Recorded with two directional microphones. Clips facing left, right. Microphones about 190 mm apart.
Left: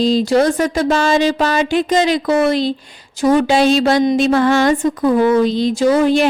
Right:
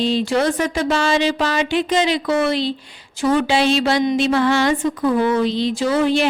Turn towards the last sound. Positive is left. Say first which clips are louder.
# left 4 dB
turn(degrees=45)  # may be behind; listen again after turning